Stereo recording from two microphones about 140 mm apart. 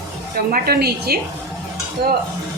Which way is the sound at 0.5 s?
90° right.